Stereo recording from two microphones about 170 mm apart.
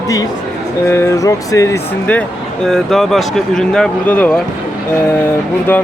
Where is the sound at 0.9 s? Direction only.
15° left (ahead or behind).